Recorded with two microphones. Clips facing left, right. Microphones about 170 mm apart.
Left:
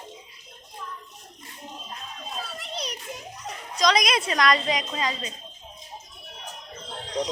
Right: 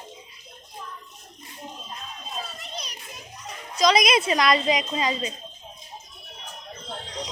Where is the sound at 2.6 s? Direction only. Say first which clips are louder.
Left 4 dB; 80° left.